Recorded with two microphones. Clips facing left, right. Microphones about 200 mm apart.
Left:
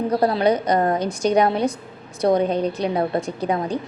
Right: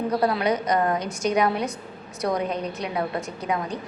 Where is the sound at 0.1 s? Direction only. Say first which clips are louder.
Left 5 dB; 30° left (ahead or behind).